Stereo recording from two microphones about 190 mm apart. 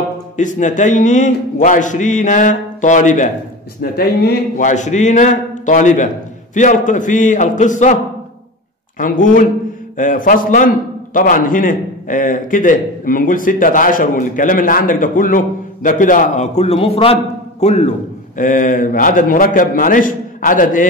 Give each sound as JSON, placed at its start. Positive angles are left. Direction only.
{"t": 0.4, "sound": "a man's voice", "side_deg": 40}
{"t": 3.8, "sound": "a man's voice", "side_deg": 55}